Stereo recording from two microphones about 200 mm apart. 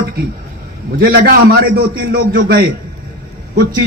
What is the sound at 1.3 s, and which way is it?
A man's voice, 50° right (ahead or behind).